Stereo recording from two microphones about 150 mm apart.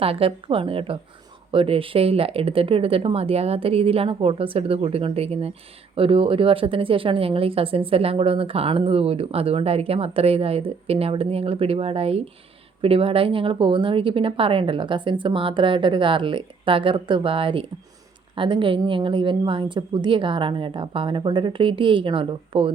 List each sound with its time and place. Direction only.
0.0 s speech: 40° right (ahead or behind)